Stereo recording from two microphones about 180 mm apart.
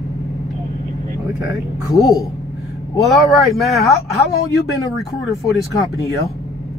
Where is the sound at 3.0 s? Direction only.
Centre (ahead or behind).